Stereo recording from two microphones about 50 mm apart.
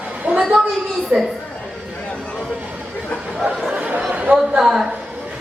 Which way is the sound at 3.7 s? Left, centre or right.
Right.